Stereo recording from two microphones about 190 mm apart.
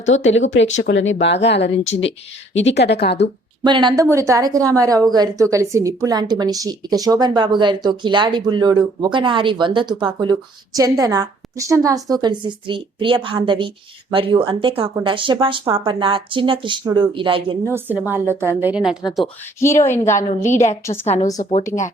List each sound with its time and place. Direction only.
0.1 s speech: 80° left; by 3.2 s 60° left (ahead or behind)
3.6 s a woman's voice: 25° right (ahead or behind)
17.7 s a woman's voice: 10° right (ahead or behind)
19.8 s a woman's voice: 15° left (ahead or behind)
20.1 s a woman's voice: 40° left (ahead or behind)